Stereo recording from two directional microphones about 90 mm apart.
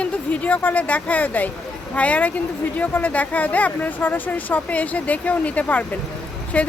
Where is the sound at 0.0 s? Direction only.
15° left (ahead or behind).